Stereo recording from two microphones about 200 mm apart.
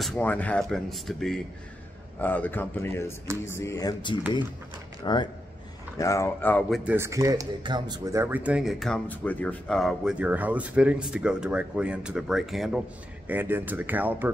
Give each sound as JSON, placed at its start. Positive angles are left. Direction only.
{"t": 0.0, "sound": "a man's voice", "side_deg": 5}
{"t": 6.8, "sound": "speech", "side_deg": -10}